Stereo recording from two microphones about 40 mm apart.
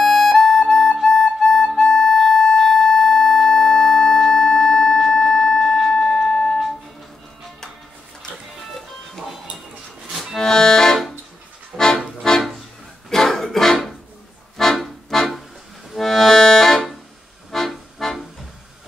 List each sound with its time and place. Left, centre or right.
0.0 s harmonica: centre
1.8 s music: centre
10.3 s accordion: centre
13.1 s music: centre
14.8 s music: centre
15.9 s accordion: centre